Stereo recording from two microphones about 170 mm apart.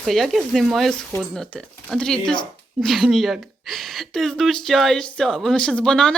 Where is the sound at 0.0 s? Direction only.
Centre (ahead or behind).